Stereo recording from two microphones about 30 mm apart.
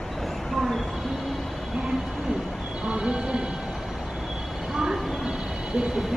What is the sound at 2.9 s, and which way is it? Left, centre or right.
Music, right.